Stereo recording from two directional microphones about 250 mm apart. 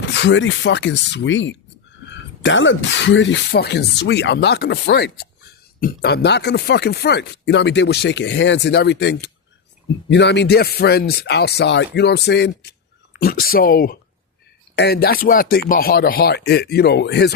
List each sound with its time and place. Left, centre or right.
0.0 s a man's voice: left